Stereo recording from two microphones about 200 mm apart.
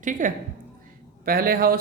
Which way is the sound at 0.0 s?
40° right (ahead or behind).